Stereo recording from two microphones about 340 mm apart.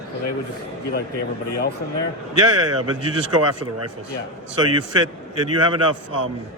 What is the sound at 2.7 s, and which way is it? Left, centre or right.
A man's voice, right.